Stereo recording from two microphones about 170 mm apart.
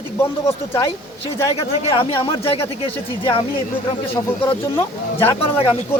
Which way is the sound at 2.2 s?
35° left (ahead or behind).